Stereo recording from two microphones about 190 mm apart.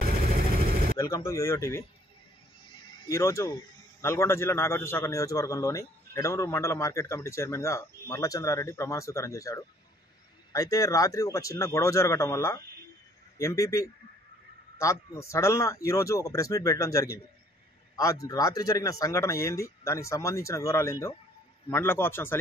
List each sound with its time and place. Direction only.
0.4 s vehicle: 50° right (ahead or behind)
0.9 s a man's voice: 15° left (ahead or behind)
3.1 s a man's voice: 15° left (ahead or behind)